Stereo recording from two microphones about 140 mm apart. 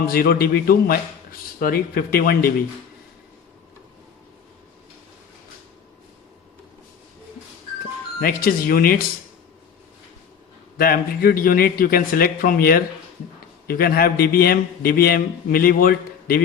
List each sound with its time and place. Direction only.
0.0 s a man's voice: 90° left
8.2 s a man's voice: 90° left
10.8 s a man's voice: 90° left